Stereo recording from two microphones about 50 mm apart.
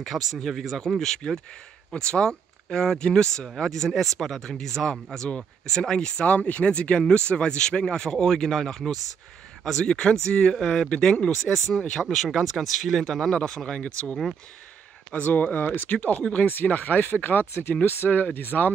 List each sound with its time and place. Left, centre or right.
0.0 s speech: centre
6.2 s speech: left
11.9 s speech: centre
15.1 s speech: left
16.2 s speech: left